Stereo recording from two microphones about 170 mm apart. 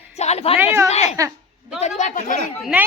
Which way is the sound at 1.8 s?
45° left (ahead or behind).